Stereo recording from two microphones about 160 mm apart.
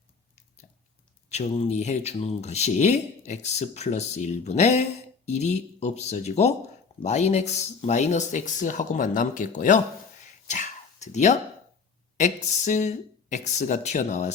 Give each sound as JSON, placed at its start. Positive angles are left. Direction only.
{"t": 1.3, "sound": "speech", "side_deg": 40}
{"t": 10.4, "sound": "whispering", "side_deg": 50}
{"t": 12.1, "sound": "speech", "side_deg": 50}